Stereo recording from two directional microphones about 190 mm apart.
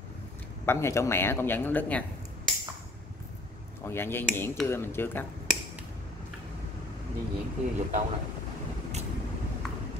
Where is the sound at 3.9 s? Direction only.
10° left (ahead or behind).